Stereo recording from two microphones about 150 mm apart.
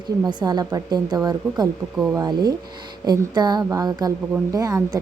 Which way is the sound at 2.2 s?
30° right (ahead or behind).